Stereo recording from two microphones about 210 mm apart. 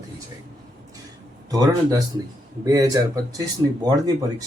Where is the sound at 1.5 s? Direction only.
15° right (ahead or behind).